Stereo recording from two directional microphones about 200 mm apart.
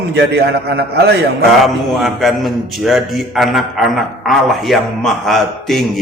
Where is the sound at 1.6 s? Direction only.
Centre (ahead or behind).